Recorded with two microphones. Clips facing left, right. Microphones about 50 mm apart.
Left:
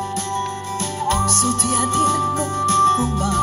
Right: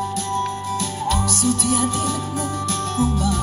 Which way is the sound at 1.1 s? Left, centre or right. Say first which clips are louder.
Left 2 dB; left.